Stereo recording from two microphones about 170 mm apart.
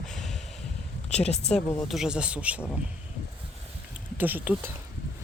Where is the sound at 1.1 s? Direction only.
40° left (ahead or behind).